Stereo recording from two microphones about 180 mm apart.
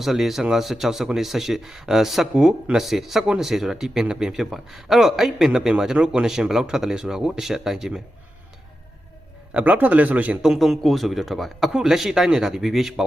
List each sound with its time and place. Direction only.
0.0 s speech: centre (ahead or behind)
9.5 s speech: 10° right (ahead or behind)